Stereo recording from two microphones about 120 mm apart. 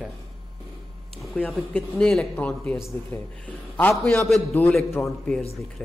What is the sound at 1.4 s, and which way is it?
Speech, 10° left (ahead or behind).